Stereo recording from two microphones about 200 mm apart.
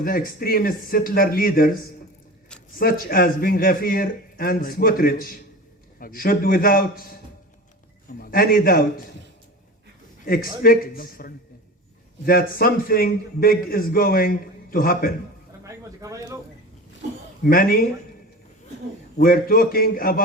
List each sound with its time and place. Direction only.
0.0 s a man's voice: 45° left (ahead or behind)
8.2 s a man's voice: 45° left (ahead or behind)
10.2 s a man's voice: 45° left (ahead or behind)
15.6 s a sound: 15° right (ahead or behind)
17.4 s a man's voice: 45° left (ahead or behind)
19.1 s a man's voice: 45° left (ahead or behind)